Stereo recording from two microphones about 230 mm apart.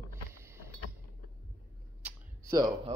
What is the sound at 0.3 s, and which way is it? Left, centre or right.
Vehicle, centre.